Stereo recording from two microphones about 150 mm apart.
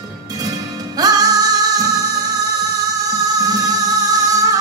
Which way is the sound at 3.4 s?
25° right (ahead or behind).